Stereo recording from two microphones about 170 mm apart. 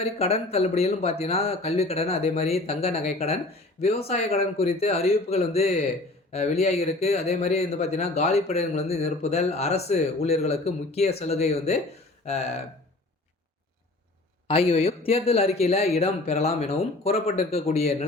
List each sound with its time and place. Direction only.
0.0 s speech: 35° left (ahead or behind)
14.4 s speech: 35° left (ahead or behind)